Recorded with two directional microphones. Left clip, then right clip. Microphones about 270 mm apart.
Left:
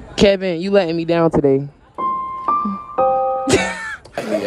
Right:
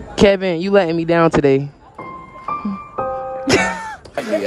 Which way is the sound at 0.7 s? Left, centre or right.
Left.